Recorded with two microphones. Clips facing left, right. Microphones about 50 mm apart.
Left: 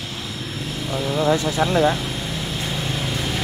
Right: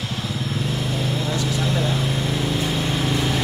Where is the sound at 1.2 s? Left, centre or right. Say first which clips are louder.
Left 5 dB; left.